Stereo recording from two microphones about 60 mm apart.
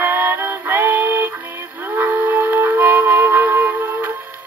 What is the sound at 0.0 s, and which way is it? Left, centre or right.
Music, right.